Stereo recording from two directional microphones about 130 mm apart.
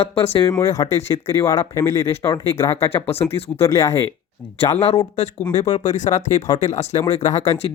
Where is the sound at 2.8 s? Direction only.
20° left (ahead or behind).